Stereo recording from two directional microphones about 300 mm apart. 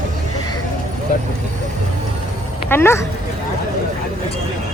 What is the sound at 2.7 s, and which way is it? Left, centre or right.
Speech, centre.